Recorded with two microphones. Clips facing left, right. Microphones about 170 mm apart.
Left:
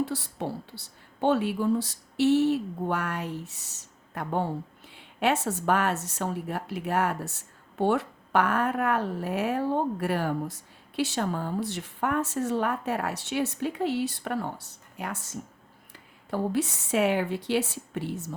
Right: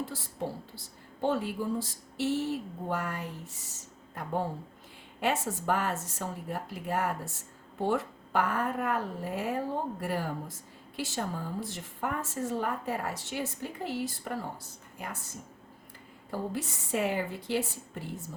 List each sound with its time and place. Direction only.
0.0 s speech: 70° left (ahead or behind)